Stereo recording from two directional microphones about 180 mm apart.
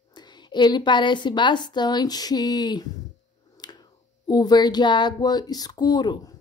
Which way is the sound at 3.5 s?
20° left (ahead or behind).